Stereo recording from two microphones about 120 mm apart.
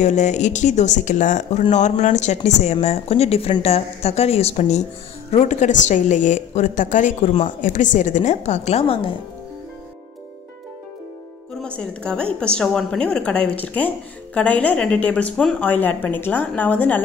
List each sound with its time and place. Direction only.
0.0 s a woman's voice: 80° left
1.7 s a woman's voice: 75° left (ahead or behind); by 9.1 s 50° left (ahead or behind)
11.6 s a woman's voice: 10° left (ahead or behind)